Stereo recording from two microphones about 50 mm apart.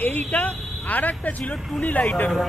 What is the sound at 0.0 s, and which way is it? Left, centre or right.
Speech, left.